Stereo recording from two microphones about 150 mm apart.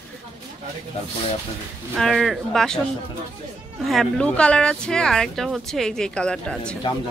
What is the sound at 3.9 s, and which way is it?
Speech, 5° left (ahead or behind).